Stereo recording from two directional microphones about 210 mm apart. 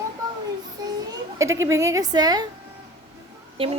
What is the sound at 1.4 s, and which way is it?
A woman's voice, 15° right (ahead or behind).